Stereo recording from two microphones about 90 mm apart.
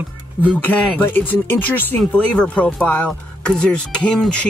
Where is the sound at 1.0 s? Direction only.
20° left (ahead or behind).